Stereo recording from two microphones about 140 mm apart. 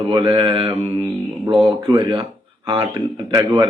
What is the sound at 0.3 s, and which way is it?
A man's voice, 35° right (ahead or behind).